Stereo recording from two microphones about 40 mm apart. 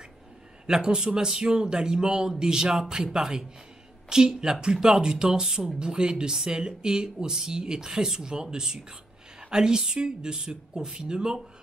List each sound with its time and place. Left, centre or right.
0.7 s speech: centre